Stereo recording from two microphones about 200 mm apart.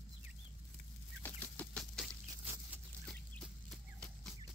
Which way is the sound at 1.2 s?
10° left (ahead or behind).